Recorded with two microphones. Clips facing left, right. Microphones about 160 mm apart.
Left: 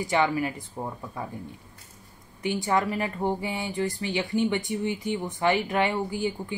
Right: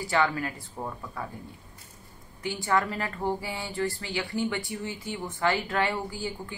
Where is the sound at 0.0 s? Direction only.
20° left (ahead or behind).